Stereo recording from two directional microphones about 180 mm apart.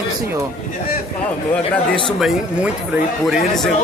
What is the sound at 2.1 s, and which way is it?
Speech, centre (ahead or behind).